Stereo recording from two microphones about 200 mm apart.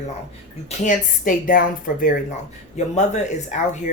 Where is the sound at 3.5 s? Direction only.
35° left (ahead or behind).